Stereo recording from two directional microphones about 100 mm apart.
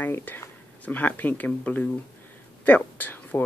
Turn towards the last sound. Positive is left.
turn(degrees=15)  # may be behind; listen again after turning